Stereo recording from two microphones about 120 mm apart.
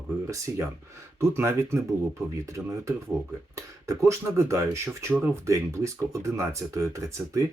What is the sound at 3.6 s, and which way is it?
Speech, 25° right (ahead or behind).